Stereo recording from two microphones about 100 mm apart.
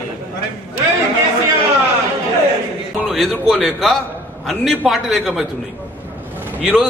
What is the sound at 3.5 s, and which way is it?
A man's voice, centre (ahead or behind).